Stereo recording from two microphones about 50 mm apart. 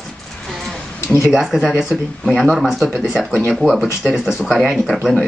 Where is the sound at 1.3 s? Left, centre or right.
Centre.